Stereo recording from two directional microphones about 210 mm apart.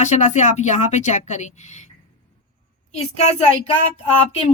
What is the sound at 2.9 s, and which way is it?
Speech, 30° left (ahead or behind).